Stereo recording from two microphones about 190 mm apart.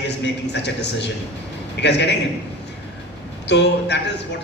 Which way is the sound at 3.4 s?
65° left (ahead or behind).